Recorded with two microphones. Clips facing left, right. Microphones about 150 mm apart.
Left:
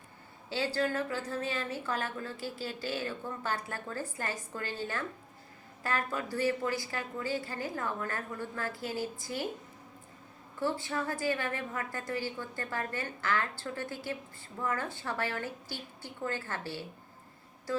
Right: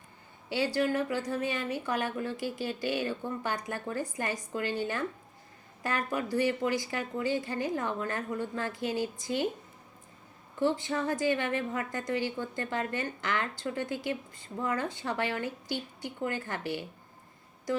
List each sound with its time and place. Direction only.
0.5 s a woman's voice: 15° right (ahead or behind)
10.6 s a woman's voice: 20° right (ahead or behind)